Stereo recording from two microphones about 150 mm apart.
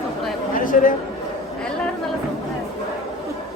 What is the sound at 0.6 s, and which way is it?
Chatter, 65° left (ahead or behind).